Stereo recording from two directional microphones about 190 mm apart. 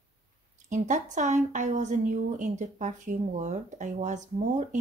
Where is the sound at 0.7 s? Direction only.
40° right (ahead or behind).